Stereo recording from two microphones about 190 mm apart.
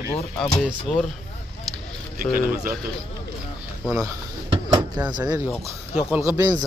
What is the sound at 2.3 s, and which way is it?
Speech, 50° right (ahead or behind).